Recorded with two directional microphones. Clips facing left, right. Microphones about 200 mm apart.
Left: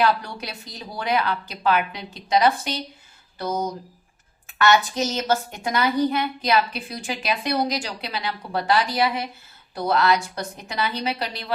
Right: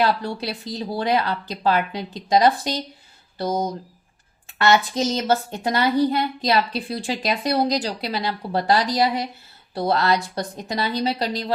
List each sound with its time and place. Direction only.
0.0 s a woman's voice: 30° right (ahead or behind)